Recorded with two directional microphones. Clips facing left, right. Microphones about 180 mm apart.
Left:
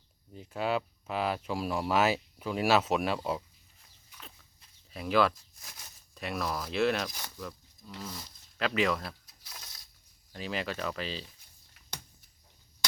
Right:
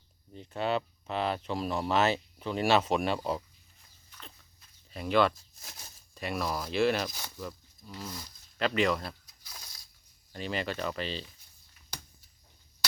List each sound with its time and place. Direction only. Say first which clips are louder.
0.3 s speech: even; 5° left (ahead or behind)
4.9 s speech: right 1 dB; centre (ahead or behind)
9.5 s a sound: even; centre (ahead or behind)
10.3 s speech: right 1 dB; centre (ahead or behind)